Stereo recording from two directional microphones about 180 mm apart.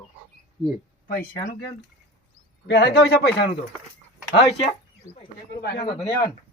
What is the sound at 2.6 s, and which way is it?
Speech, 65° left (ahead or behind).